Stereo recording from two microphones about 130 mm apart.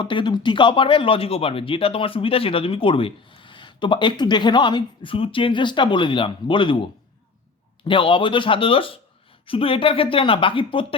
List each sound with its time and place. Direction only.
0.0 s speech: 35° left (ahead or behind)
7.9 s speech: 40° left (ahead or behind)